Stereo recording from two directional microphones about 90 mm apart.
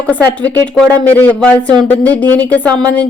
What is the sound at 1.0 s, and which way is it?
A woman's voice, 20° left (ahead or behind).